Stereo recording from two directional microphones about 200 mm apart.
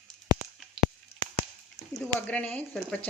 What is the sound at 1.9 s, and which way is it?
Speech, 5° left (ahead or behind).